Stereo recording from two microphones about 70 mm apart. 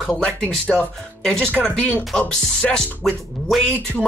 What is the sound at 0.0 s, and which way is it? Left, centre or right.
Speech, centre.